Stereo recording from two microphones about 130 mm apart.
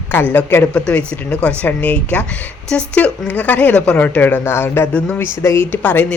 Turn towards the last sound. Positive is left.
turn(degrees=10)  # may be behind; listen again after turning